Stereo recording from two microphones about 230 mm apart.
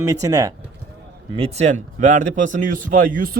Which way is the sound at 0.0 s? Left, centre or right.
Centre.